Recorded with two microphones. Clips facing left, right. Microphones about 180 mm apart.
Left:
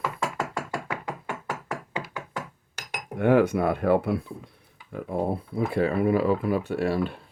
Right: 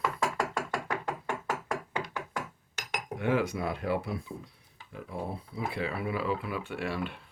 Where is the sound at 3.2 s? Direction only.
55° left (ahead or behind); by 7.2 s 40° left (ahead or behind).